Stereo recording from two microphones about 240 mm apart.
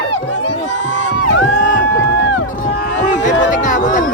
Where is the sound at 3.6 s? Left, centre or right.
Left.